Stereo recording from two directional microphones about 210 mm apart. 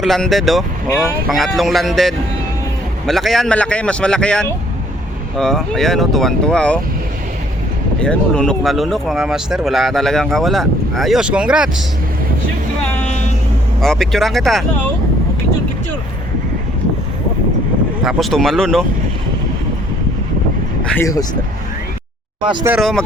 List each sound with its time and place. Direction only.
0.0 s speech: centre (ahead or behind)
8.0 s speech: 5° left (ahead or behind)
13.8 s speech: centre (ahead or behind)
18.0 s speech: centre (ahead or behind)
21.0 s speech: 15° left (ahead or behind)
22.6 s speech: 5° right (ahead or behind)